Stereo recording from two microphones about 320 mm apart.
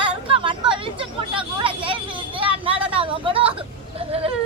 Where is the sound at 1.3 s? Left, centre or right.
Centre.